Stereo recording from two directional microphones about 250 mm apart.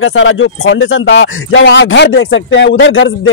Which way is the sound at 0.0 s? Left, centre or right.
Left.